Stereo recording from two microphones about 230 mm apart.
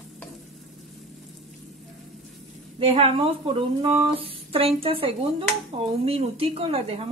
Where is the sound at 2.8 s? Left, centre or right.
Right.